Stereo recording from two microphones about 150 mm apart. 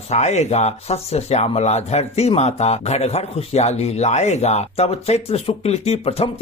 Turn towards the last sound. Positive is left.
turn(degrees=40)  # may be behind; listen again after turning